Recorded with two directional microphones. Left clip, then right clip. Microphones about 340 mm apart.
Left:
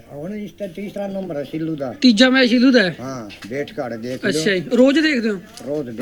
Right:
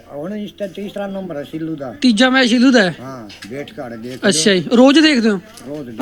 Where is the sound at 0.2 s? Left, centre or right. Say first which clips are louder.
Right 4 dB; centre.